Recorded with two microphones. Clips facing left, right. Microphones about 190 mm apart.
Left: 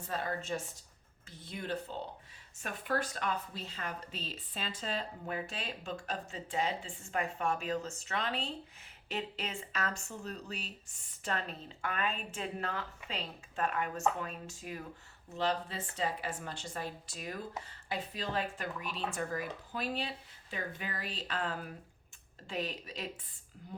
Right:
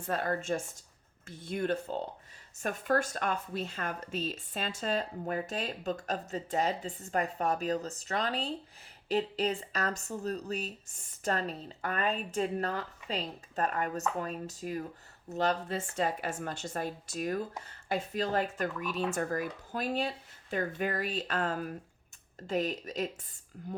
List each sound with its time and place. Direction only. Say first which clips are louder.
0.1 s a woman's voice: right 5 dB; 55° right (ahead or behind)